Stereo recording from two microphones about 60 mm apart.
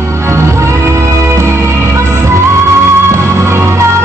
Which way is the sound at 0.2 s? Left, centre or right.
Right.